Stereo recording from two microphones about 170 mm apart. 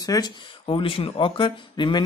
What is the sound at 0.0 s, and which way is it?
A man's voice, 25° left (ahead or behind).